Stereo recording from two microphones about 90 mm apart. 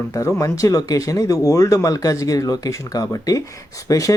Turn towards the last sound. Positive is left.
turn(degrees=40)  # may be behind; listen again after turning